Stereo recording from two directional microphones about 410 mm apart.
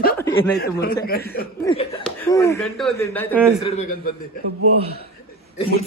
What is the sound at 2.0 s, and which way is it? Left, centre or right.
Speech, centre.